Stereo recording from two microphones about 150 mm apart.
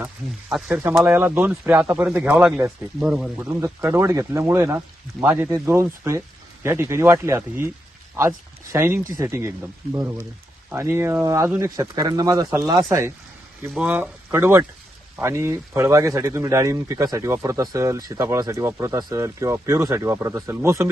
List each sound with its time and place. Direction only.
0.5 s speech: centre (ahead or behind)
1.0 s speech: 15° right (ahead or behind)
3.5 s speech: 20° right (ahead or behind)
8.7 s speech: 15° right (ahead or behind)
13.7 s speech: 5° right (ahead or behind)